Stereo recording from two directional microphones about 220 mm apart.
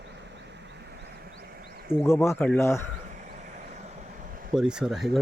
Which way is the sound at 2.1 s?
10° left (ahead or behind).